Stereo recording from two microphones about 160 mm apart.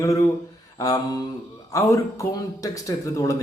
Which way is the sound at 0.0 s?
20° left (ahead or behind).